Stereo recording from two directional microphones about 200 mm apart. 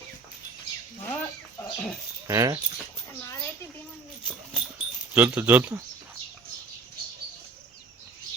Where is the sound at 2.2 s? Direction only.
15° right (ahead or behind).